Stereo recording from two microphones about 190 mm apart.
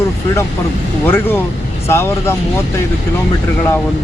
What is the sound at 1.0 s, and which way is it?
Speech, 10° left (ahead or behind).